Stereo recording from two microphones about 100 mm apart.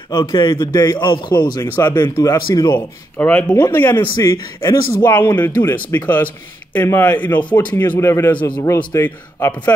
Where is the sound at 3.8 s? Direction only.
50° left (ahead or behind).